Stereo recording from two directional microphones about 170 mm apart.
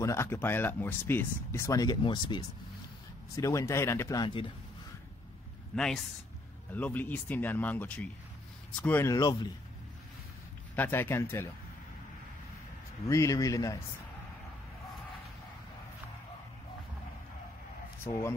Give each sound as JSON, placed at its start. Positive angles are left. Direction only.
{"t": 0.0, "sound": "speech", "side_deg": 15}
{"t": 5.8, "sound": "speech", "side_deg": 5}
{"t": 10.8, "sound": "speech", "side_deg": 15}
{"t": 13.0, "sound": "speech", "side_deg": 20}